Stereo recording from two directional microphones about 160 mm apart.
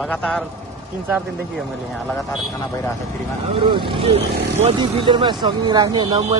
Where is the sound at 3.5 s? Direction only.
30° right (ahead or behind).